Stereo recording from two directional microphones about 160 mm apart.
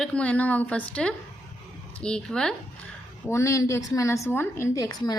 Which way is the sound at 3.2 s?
15° left (ahead or behind).